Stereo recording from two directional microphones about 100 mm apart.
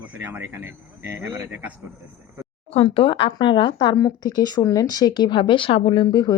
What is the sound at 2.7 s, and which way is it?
Speech, 70° left (ahead or behind).